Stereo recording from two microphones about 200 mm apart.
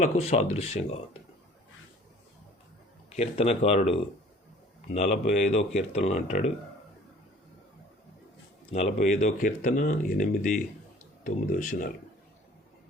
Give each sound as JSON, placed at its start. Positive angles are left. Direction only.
{"t": 0.0, "sound": "speech", "side_deg": 35}
{"t": 3.1, "sound": "speech", "side_deg": 30}
{"t": 8.7, "sound": "speech", "side_deg": 35}